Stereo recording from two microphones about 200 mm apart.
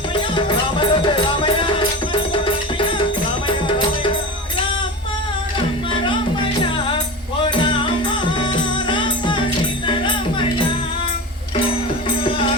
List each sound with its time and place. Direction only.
0.1 s music: 25° left (ahead or behind)
5.5 s music: 25° left (ahead or behind)
7.5 s music: 25° left (ahead or behind)
12.2 s music: 25° left (ahead or behind)